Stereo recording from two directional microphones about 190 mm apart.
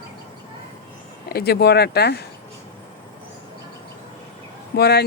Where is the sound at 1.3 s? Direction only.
55° left (ahead or behind).